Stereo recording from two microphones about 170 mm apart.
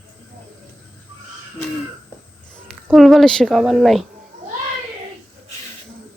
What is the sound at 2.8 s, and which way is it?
A woman's voice, centre (ahead or behind).